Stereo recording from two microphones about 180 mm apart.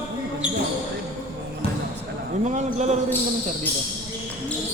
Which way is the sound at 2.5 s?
40° right (ahead or behind).